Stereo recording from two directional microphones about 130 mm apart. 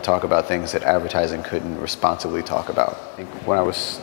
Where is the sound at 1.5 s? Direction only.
10° left (ahead or behind).